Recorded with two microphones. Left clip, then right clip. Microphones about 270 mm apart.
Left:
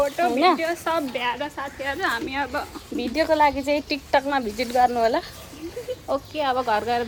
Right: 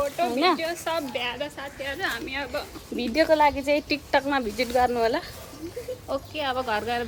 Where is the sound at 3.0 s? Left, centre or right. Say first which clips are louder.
Left 1 dB; centre.